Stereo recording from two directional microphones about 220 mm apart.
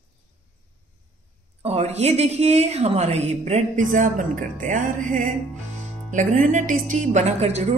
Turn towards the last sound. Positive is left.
turn(degrees=-30)  # may be behind; listen again after turning